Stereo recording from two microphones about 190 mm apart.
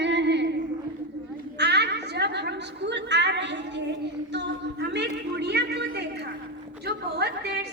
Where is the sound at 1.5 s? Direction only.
60° right (ahead or behind).